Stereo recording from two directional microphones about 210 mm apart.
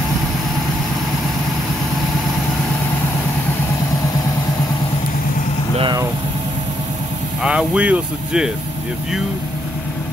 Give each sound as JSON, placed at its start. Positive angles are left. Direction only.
{"t": 5.8, "sound": "vehicle", "side_deg": -20}
{"t": 7.4, "sound": "speech", "side_deg": -5}